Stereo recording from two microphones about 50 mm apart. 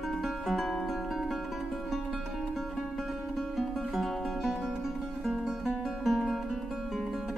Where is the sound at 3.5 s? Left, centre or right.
Centre.